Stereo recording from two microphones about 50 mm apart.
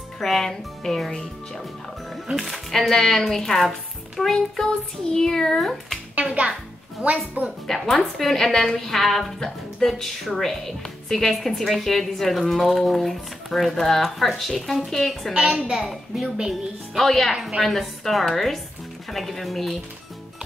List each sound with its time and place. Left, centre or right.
0.2 s speech: centre
2.3 s a woman's voice: centre
7.0 s speech: right
7.6 s a woman's voice: centre
15.3 s a child's voice: centre